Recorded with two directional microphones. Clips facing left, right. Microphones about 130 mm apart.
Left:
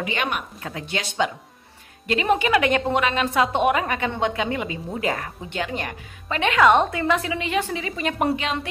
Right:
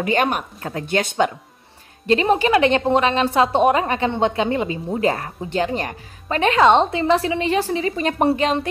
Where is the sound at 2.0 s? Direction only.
35° right (ahead or behind).